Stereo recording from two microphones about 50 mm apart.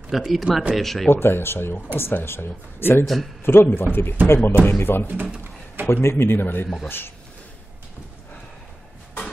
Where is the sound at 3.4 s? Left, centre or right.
Left.